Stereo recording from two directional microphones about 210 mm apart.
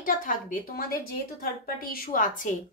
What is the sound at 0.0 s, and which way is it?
A woman's voice, 40° left (ahead or behind).